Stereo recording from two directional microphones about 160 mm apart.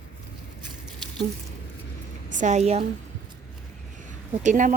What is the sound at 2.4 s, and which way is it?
Speech, 45° right (ahead or behind).